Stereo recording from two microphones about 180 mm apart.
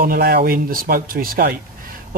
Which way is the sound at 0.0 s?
55° right (ahead or behind).